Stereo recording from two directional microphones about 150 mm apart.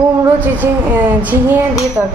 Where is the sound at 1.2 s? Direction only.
10° right (ahead or behind).